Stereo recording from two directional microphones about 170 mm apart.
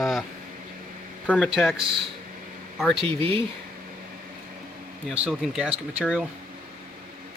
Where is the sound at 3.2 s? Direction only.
30° right (ahead or behind).